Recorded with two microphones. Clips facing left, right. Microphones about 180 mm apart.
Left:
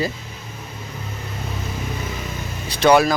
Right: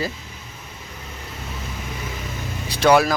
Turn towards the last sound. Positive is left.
turn(degrees=-5)  # may be behind; listen again after turning